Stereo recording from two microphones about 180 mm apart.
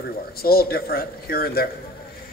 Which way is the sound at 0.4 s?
55° left (ahead or behind).